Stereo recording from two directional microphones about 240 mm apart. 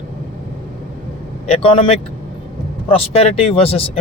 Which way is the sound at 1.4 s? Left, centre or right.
Left.